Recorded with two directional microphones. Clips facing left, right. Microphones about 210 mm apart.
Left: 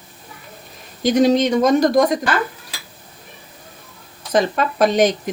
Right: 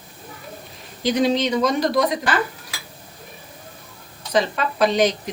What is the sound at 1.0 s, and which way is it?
Speech, 45° left (ahead or behind).